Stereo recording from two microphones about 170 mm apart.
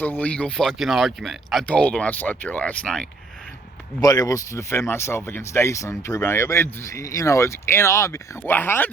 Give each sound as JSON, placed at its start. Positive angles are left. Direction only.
{"t": 0.0, "sound": "speech", "side_deg": 10}
{"t": 4.0, "sound": "speech", "side_deg": 20}